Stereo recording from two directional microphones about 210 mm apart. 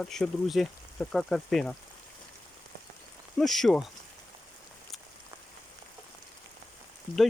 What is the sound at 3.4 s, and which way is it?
Speech, centre (ahead or behind).